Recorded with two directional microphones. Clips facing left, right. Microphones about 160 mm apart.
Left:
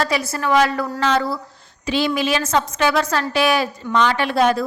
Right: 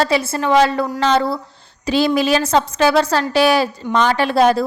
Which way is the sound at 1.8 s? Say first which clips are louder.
Right 4 dB; 40° right (ahead or behind).